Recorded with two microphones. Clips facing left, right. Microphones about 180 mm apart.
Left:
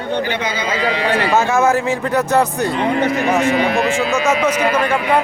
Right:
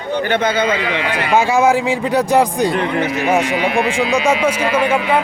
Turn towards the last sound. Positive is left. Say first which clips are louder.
# right 1 dB
turn(degrees=-10)  # may be behind; listen again after turning